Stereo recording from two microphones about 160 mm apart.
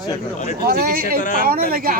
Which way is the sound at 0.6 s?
75° right (ahead or behind).